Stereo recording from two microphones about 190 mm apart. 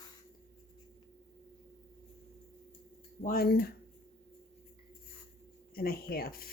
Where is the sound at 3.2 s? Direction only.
50° left (ahead or behind).